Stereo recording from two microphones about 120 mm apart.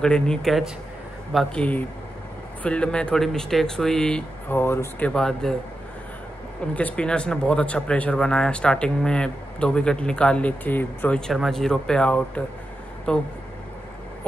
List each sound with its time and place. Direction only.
0.0 s speech: 5° left (ahead or behind)
4.6 s speech: 20° left (ahead or behind)
6.6 s speech: 10° left (ahead or behind)